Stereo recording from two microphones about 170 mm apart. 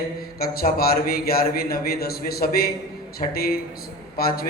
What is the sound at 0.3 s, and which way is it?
A man's voice, 60° left (ahead or behind).